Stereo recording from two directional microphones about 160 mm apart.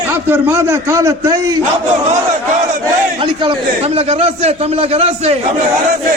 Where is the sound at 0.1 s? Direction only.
10° right (ahead or behind).